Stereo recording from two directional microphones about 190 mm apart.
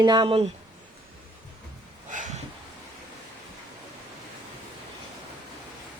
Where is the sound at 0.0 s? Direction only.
20° right (ahead or behind).